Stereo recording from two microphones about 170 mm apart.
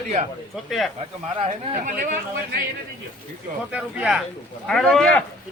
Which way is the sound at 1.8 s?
50° right (ahead or behind).